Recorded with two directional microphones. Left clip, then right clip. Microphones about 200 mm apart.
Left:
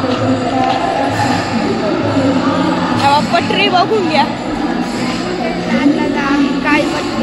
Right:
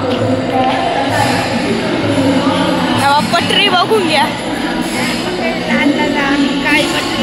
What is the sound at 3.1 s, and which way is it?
Speech, centre (ahead or behind).